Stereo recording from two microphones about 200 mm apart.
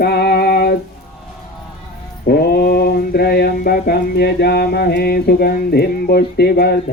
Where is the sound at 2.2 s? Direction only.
50° left (ahead or behind).